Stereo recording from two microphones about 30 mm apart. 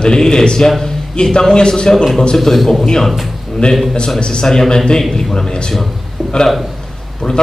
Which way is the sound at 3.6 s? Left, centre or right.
Left.